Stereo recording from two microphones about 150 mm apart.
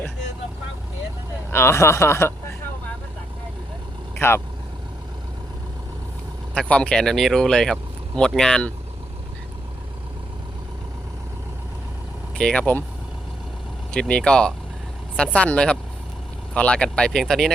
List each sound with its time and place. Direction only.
1.5 s speech: 15° left (ahead or behind)
4.2 s speech: 15° left (ahead or behind)
6.5 s speech: 5° left (ahead or behind)
12.4 s speech: 5° left (ahead or behind)
13.9 s speech: 5° left (ahead or behind)